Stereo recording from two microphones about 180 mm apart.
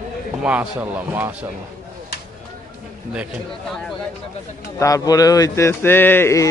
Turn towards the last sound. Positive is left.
turn(degrees=15)  # may be behind; listen again after turning